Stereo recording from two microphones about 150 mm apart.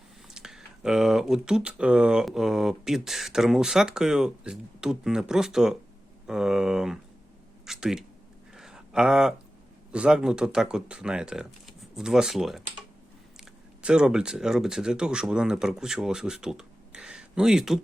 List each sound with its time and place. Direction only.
0.3 s speech: 5° right (ahead or behind)
7.6 s a sound: 5° right (ahead or behind)
9.9 s speech: 5° right (ahead or behind)